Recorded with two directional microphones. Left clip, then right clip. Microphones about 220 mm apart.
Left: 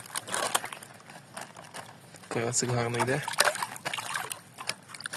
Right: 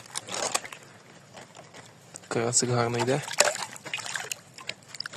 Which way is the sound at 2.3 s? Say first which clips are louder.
Right 3 dB; 20° right (ahead or behind).